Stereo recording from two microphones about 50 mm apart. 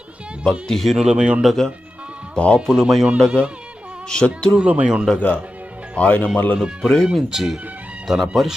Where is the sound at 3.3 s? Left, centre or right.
Right.